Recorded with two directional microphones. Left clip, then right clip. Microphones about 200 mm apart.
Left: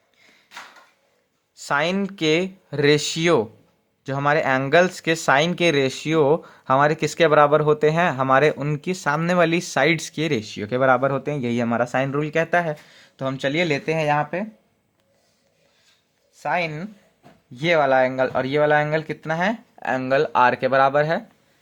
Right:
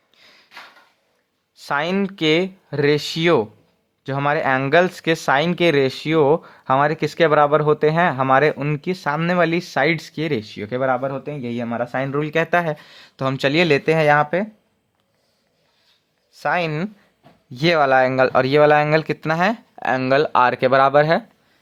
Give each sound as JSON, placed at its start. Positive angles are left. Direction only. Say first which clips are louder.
{"t": 1.6, "sound": "speech", "louder": "right 1 dB", "side_deg": -15}
{"t": 11.0, "sound": "a man's voice", "louder": "left 3 dB", "side_deg": 20}
{"t": 12.2, "sound": "speech", "louder": "right 5 dB", "side_deg": -15}
{"t": 16.4, "sound": "speech", "louder": "right 3 dB", "side_deg": -35}